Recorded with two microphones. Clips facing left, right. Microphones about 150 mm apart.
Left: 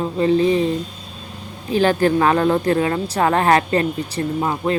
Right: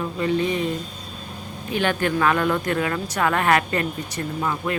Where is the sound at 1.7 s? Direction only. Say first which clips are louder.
Left 7 dB; 35° left (ahead or behind).